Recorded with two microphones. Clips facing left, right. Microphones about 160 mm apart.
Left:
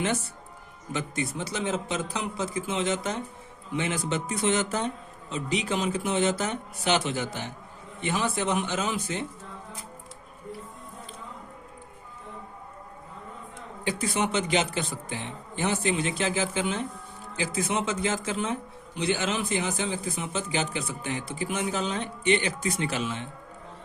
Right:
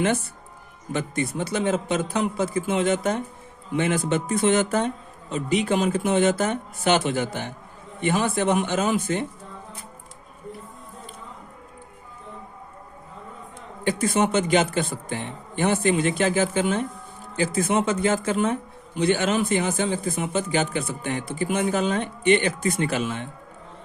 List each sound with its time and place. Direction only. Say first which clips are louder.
0.9 s a man's voice: right 5 dB; 55° right (ahead or behind)
13.8 s a man's voice: right 6 dB; 50° right (ahead or behind)